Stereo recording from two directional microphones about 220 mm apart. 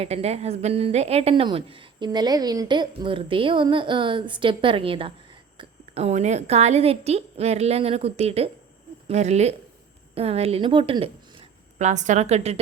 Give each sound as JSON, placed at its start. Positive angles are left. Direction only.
{"t": 0.0, "sound": "a woman's voice", "side_deg": -30}